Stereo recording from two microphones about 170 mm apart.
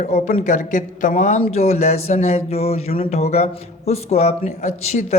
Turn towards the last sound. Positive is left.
turn(degrees=40)  # may be behind; listen again after turning